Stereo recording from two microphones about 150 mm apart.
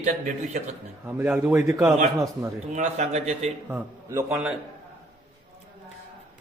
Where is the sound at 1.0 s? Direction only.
10° right (ahead or behind).